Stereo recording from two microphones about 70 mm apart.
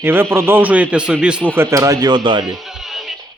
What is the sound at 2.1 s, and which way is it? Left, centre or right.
Speech, right.